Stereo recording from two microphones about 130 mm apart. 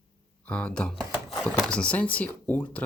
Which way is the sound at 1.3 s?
Centre (ahead or behind).